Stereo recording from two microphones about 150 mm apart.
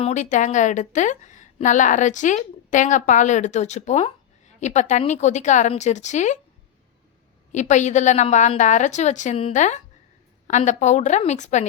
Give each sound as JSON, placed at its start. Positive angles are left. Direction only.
{"t": 0.0, "sound": "a woman's voice", "side_deg": 50}
{"t": 7.5, "sound": "a woman's voice", "side_deg": 55}